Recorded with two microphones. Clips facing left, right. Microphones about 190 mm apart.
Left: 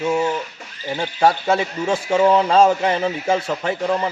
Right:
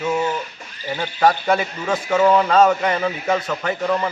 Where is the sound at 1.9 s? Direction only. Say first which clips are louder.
Even; 30° left (ahead or behind).